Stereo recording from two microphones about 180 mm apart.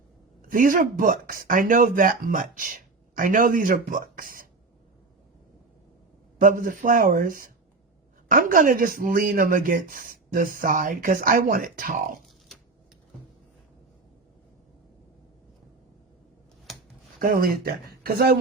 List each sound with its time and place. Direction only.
0.4 s speech: 50° right (ahead or behind)
6.4 s speech: 50° right (ahead or behind)
17.2 s speech: 55° right (ahead or behind)